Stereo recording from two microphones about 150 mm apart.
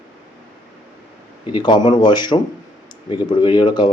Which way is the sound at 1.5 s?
30° left (ahead or behind).